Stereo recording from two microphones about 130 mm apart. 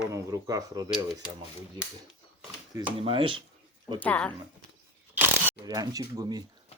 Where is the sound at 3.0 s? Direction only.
45° right (ahead or behind).